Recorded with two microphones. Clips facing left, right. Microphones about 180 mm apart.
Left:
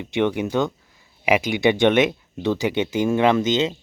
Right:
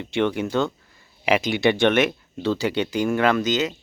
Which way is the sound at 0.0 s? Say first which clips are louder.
Left 1 dB; 15° left (ahead or behind).